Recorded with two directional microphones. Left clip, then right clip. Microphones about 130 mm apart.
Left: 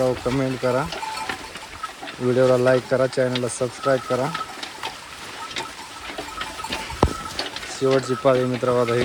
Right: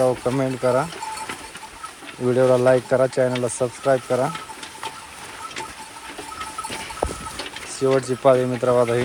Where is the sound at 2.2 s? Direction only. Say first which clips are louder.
Right 1 dB; 10° right (ahead or behind).